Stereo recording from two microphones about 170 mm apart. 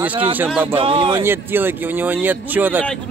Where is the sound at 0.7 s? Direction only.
30° right (ahead or behind).